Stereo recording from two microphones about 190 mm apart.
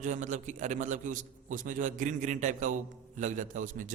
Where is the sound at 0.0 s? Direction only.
40° right (ahead or behind).